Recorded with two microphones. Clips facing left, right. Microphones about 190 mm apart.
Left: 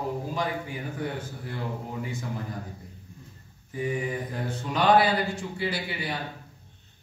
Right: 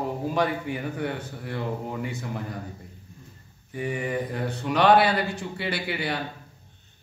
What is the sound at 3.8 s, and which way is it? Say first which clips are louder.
Speech: right 2 dB; 65° right (ahead or behind).